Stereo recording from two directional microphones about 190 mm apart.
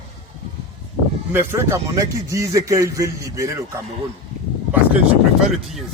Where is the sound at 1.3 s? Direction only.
15° right (ahead or behind).